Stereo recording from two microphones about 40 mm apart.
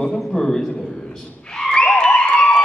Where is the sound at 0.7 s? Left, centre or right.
Left.